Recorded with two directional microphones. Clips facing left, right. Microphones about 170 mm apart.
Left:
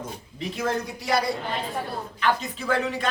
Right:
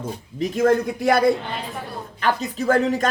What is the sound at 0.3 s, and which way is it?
Speech, 45° right (ahead or behind).